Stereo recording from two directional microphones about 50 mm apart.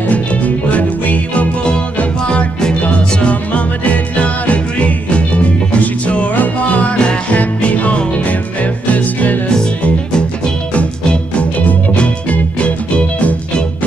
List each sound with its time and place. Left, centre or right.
0.7 s music: left
10.7 s music: left